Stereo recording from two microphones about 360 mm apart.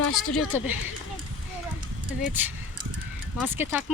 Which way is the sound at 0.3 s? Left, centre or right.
Centre.